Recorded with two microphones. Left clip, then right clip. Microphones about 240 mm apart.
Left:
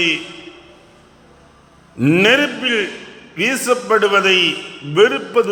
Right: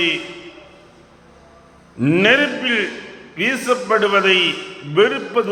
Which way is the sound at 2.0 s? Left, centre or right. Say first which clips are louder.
Left 1 dB; centre.